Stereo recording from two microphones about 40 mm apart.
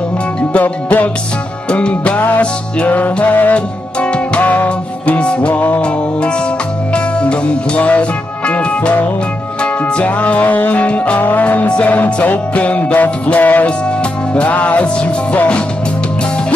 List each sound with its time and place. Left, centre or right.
0.5 s music: left
1.7 s music: left
2.1 s music: left
7.2 s music: left